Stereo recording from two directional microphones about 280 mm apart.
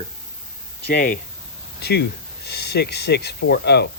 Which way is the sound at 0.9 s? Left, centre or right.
Left.